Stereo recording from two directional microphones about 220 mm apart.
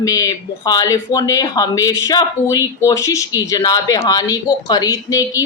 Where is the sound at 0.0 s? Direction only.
15° left (ahead or behind).